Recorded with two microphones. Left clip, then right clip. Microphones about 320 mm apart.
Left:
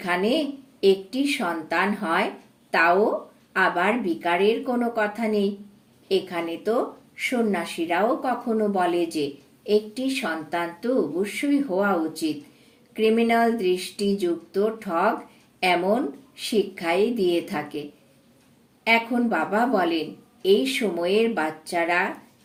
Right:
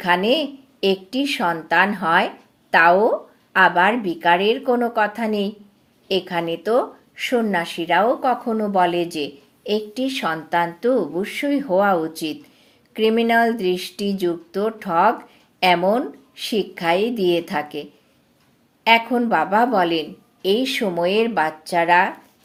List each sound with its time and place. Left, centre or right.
0.0 s a woman's voice: right
18.9 s a woman's voice: right